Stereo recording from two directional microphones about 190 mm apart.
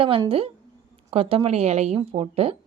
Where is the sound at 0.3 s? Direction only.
30° right (ahead or behind).